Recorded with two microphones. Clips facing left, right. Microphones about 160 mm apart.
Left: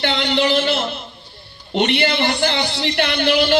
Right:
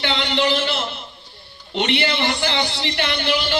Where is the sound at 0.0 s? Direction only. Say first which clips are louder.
Left 2 dB; 50° left (ahead or behind).